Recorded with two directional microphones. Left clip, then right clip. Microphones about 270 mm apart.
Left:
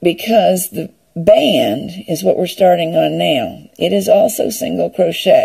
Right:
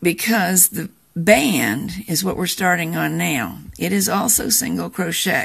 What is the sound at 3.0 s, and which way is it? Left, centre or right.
Speech, left.